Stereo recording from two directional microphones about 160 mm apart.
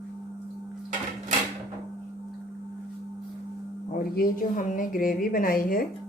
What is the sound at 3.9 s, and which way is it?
A woman's voice, 60° left (ahead or behind).